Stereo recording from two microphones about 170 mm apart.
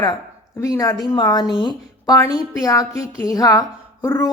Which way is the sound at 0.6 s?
20° left (ahead or behind).